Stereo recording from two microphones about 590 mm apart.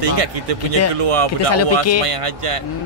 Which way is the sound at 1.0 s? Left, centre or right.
Right.